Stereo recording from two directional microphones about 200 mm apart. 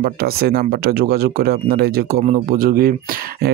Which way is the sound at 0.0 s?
50° right (ahead or behind).